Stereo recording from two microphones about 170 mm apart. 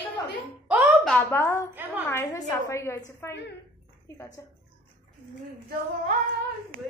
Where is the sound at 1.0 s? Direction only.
Centre (ahead or behind).